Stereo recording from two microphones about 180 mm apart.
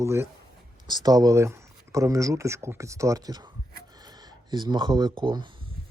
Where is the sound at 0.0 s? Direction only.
15° right (ahead or behind).